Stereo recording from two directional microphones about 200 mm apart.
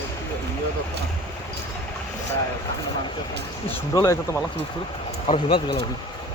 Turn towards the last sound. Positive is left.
turn(degrees=35)  # may be behind; listen again after turning